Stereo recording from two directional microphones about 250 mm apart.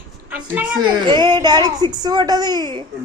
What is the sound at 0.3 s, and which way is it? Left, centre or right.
Speech, centre.